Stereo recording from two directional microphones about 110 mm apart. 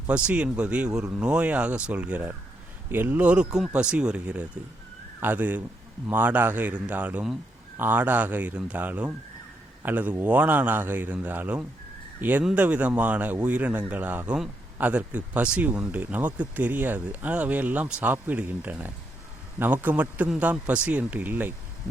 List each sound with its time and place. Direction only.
0.1 s speech: 10° right (ahead or behind)